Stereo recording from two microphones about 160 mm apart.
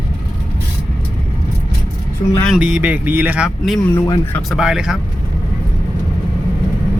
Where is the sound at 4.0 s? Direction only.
25° left (ahead or behind).